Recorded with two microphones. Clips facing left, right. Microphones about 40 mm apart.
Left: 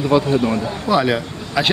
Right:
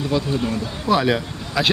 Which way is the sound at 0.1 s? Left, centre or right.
Left.